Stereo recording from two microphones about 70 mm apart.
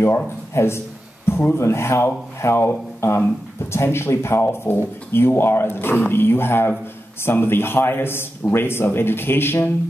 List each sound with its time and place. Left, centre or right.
0.0 s a man's voice: left